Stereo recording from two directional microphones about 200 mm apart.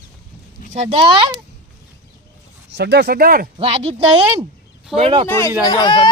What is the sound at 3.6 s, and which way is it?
Speech, 30° right (ahead or behind).